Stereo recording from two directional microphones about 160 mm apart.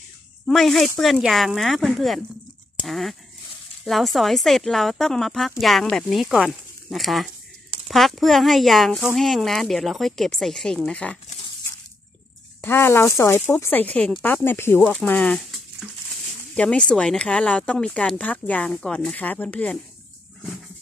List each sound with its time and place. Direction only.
0.5 s a woman's voice: centre (ahead or behind)
12.6 s speech: 15° left (ahead or behind)
14.8 s a woman's voice: centre (ahead or behind)
16.5 s a woman's voice: 5° left (ahead or behind)